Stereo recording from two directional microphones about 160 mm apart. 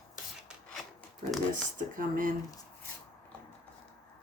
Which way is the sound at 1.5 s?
55° right (ahead or behind).